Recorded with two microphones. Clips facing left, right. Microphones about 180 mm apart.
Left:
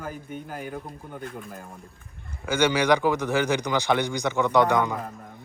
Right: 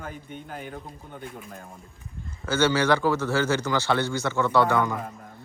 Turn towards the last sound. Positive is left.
turn(degrees=20)  # may be behind; listen again after turning